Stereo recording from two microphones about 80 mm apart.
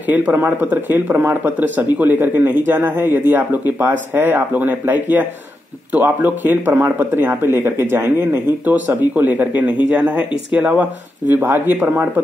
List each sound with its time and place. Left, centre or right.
0.0 s a man's voice: right